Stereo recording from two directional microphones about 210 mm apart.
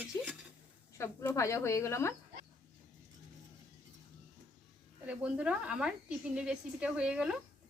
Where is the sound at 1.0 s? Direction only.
15° left (ahead or behind).